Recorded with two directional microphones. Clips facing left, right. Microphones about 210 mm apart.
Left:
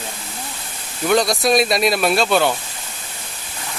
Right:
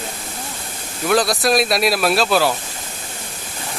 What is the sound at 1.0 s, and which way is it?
Speech, centre (ahead or behind).